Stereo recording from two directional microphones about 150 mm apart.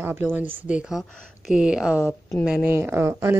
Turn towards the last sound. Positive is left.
turn(degrees=-15)  # may be behind; listen again after turning